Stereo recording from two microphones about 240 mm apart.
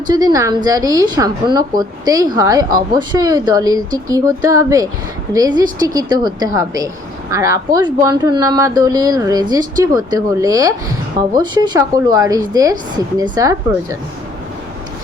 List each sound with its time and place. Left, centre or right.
0.1 s a woman's voice: centre